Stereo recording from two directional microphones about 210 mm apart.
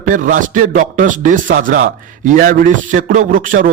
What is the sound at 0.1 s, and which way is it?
A man's voice, 40° right (ahead or behind).